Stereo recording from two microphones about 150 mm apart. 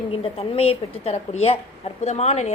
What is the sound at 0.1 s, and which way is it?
A woman's voice, 40° left (ahead or behind).